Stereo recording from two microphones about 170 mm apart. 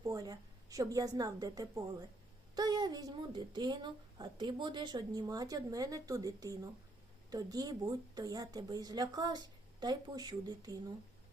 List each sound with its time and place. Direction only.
0.0 s a woman's voice: 20° right (ahead or behind)